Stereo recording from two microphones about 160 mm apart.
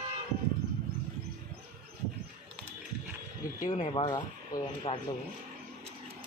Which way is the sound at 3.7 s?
45° left (ahead or behind).